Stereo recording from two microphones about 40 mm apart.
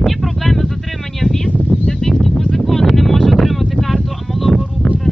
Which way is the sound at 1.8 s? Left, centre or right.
Centre.